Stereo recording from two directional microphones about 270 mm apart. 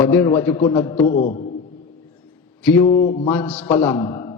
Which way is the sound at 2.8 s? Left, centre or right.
Left.